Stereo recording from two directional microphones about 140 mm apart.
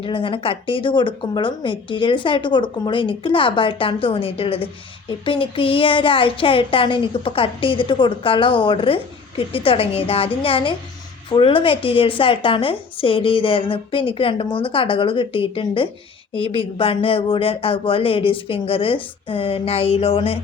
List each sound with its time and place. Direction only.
0.0 s speech: 40° left (ahead or behind)